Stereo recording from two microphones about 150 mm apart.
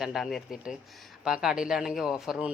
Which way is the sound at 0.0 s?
Centre (ahead or behind).